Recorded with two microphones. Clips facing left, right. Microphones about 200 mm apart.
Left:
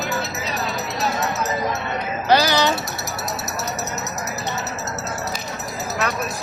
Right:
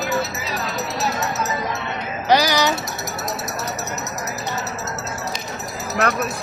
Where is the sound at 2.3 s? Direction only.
15° right (ahead or behind).